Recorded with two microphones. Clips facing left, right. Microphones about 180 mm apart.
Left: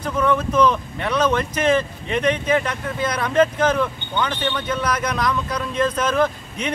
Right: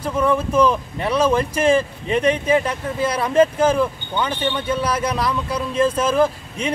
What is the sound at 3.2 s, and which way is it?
Speech, 10° right (ahead or behind).